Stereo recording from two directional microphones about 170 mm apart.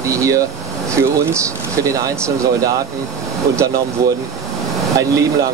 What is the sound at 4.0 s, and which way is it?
Speech, 20° right (ahead or behind).